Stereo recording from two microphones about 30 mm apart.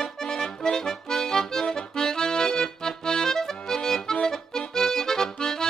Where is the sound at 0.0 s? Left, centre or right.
Left.